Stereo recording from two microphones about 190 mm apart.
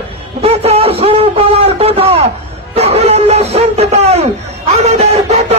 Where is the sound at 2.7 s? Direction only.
35° right (ahead or behind).